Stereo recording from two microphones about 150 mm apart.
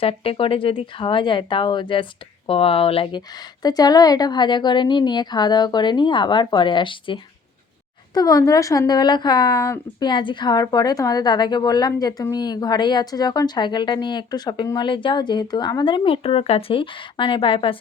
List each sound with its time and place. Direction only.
0.0 s a woman's voice: 40° left (ahead or behind)